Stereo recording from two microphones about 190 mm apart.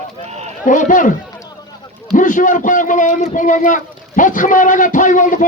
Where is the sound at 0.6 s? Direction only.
40° left (ahead or behind).